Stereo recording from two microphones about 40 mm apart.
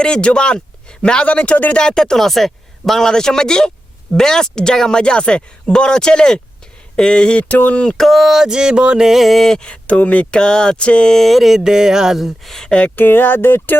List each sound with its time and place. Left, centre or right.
0.0 s speech: left
1.7 s speech: left
7.3 s speech: left
7.9 s a sound: centre
8.4 s music: centre
9.0 s a sound: centre
9.5 s speech: left
10.3 s speech: left
11.1 s a sound: centre
11.5 s a sound: centre
12.6 s speech: left
13.0 s speech: left